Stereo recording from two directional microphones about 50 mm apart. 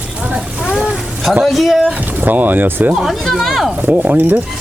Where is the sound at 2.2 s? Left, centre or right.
Right.